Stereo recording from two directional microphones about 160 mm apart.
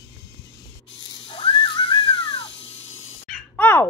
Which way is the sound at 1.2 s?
30° left (ahead or behind).